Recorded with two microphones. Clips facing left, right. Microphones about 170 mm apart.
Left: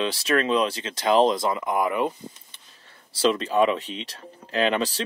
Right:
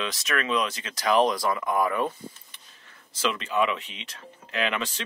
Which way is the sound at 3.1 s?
35° left (ahead or behind).